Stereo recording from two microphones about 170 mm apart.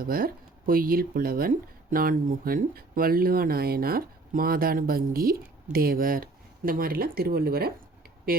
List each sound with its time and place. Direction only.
0.0 s speech: 60° right (ahead or behind)